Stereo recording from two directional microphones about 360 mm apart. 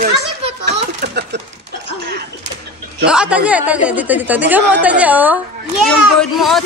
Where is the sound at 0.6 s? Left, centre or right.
Right.